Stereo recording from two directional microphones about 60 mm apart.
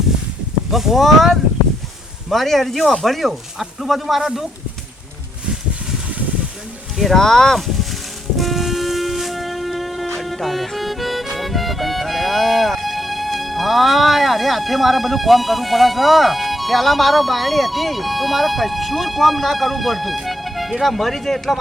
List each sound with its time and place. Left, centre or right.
0.7 s speech: centre
4.2 s speech: centre
6.1 s a sound: right
6.9 s speech: centre
7.2 s speech: centre
8.4 s music: centre
10.2 s speech: centre